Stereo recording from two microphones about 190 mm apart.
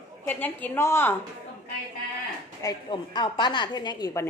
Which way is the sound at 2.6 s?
20° left (ahead or behind).